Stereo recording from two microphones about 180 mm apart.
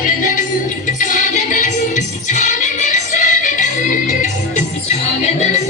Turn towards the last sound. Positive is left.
turn(degrees=45)  # may be behind; listen again after turning